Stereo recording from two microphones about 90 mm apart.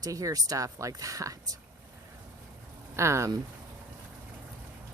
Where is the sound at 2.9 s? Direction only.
30° right (ahead or behind).